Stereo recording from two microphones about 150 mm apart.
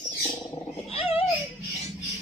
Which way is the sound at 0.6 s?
45° left (ahead or behind).